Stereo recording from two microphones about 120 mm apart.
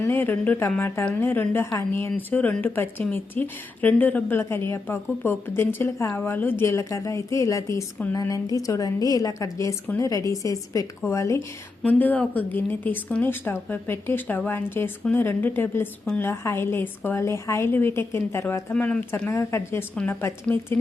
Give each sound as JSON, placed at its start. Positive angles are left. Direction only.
{"t": 0.0, "sound": "a woman's voice", "side_deg": 15}
{"t": 11.8, "sound": "a woman's voice", "side_deg": 15}